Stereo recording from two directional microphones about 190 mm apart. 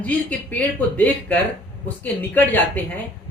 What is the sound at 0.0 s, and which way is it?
Speech, 10° left (ahead or behind).